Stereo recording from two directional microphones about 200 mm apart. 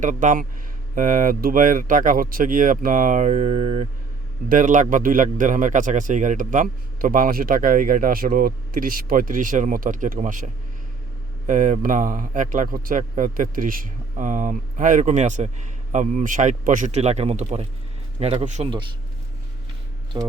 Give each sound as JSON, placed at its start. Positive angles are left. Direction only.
{"t": 0.0, "sound": "a man's voice", "side_deg": -40}